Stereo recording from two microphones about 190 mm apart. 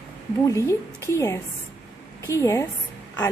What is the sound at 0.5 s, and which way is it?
A woman's voice, 15° left (ahead or behind).